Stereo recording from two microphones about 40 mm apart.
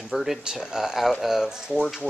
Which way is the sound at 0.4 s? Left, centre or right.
Centre.